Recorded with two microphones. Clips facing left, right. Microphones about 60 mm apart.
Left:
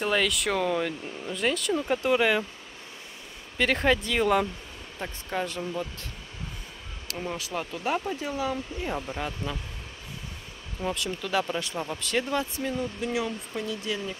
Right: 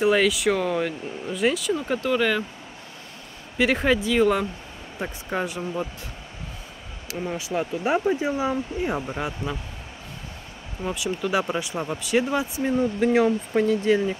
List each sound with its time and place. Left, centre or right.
0.0 s speech: centre
2.0 s speech: centre
3.5 s speech: centre
4.9 s speech: centre
7.3 s speech: centre
10.9 s speech: centre
13.0 s speech: right